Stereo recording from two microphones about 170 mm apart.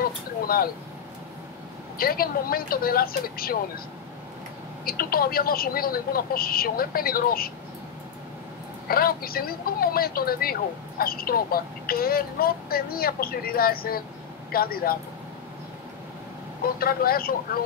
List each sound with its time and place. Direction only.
0.0 s a sound: 60° left (ahead or behind)
2.0 s speech: 60° left (ahead or behind)
4.8 s speech: 60° left (ahead or behind)
8.8 s speech: 60° left (ahead or behind)
16.8 s speech: 60° left (ahead or behind)